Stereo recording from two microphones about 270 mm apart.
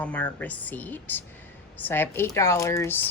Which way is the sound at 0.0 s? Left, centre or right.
Centre.